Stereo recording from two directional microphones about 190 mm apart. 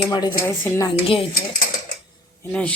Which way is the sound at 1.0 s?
30° left (ahead or behind).